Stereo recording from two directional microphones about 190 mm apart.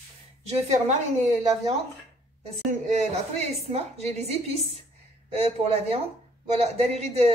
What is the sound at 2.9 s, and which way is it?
A woman's voice, 35° right (ahead or behind).